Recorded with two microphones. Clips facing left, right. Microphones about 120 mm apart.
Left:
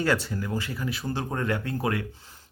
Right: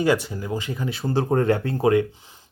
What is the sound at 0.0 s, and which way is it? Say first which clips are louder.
Speech: right 5 dB; 15° right (ahead or behind).